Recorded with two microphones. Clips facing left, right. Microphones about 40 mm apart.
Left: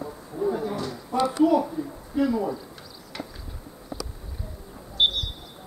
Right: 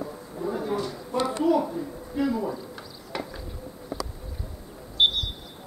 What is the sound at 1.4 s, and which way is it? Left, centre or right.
Speech, centre.